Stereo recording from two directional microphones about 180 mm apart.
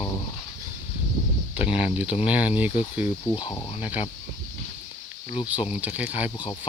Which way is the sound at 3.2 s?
25° left (ahead or behind).